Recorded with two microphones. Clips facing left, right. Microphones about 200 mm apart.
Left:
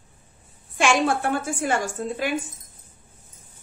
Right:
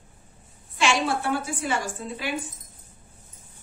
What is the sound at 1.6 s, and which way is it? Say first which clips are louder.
Speech: left 4 dB; 50° left (ahead or behind).